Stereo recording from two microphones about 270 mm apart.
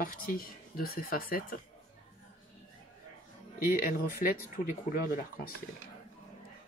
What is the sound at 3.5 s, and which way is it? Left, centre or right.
Speech, left.